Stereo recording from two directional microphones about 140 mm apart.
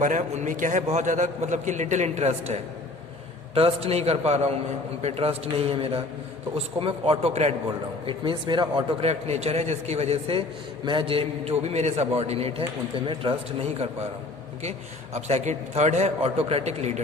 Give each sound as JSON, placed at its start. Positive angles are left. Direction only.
{"t": 0.0, "sound": "a man's voice", "side_deg": -65}
{"t": 8.0, "sound": "speech", "side_deg": -35}
{"t": 9.0, "sound": "a man's voice", "side_deg": -50}